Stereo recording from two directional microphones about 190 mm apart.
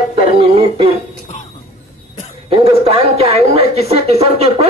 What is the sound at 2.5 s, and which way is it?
A woman's voice, 30° right (ahead or behind).